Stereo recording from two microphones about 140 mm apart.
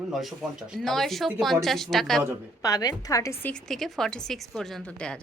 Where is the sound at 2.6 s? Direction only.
25° left (ahead or behind).